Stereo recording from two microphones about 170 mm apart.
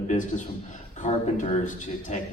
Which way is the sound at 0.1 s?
45° left (ahead or behind).